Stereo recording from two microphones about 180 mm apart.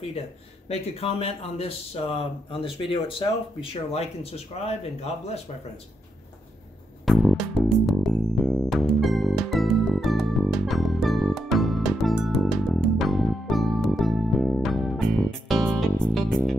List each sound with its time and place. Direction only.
0.7 s speech: 35° left (ahead or behind)
7.1 s music: centre (ahead or behind)